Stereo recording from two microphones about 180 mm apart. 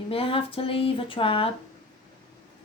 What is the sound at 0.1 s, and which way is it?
A woman's voice, 30° left (ahead or behind).